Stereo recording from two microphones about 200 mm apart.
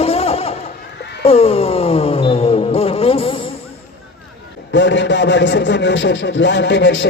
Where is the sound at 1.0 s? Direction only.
55° left (ahead or behind).